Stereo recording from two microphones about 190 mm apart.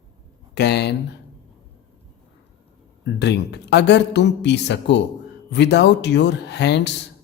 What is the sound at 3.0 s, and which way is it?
Speech, 65° left (ahead or behind).